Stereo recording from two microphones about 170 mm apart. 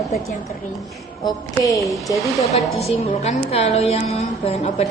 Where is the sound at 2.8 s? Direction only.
35° left (ahead or behind).